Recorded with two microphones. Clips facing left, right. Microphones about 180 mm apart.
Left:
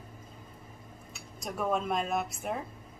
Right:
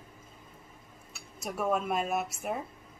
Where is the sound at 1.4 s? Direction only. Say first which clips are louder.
Right 1 dB; 5° right (ahead or behind).